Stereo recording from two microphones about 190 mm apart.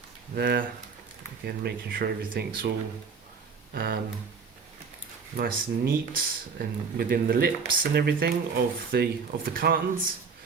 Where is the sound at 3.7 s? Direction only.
55° right (ahead or behind).